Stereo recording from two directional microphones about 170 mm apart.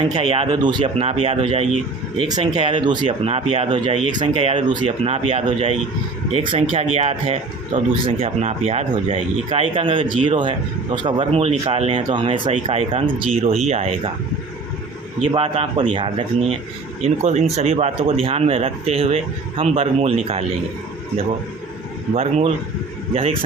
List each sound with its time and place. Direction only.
0.1 s speech: 30° right (ahead or behind)
15.3 s speech: 30° right (ahead or behind)
22.1 s speech: 35° right (ahead or behind)